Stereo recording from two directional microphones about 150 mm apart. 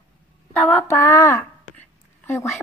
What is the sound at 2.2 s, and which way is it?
Speech, 15° left (ahead or behind).